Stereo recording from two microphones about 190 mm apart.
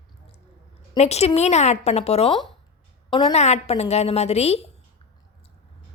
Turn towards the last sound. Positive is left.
turn(degrees=35)  # may be behind; listen again after turning